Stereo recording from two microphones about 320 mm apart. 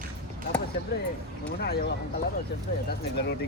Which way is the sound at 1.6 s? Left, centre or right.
Left.